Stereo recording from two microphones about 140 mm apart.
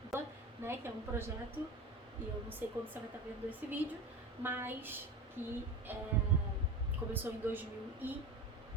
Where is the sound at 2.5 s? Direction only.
15° right (ahead or behind).